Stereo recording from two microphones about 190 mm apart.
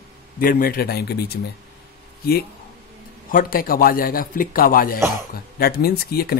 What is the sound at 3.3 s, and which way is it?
Speech, 50° left (ahead or behind).